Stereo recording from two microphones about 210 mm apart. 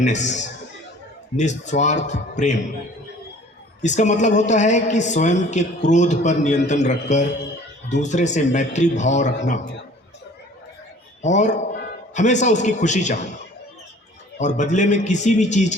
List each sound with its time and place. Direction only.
0.0 s a woman's voice: 35° left (ahead or behind)
1.4 s a woman's voice: 35° left (ahead or behind)
3.8 s a woman's voice: 35° left (ahead or behind)
11.2 s a woman's voice: 35° left (ahead or behind)
14.3 s a woman's voice: 35° left (ahead or behind)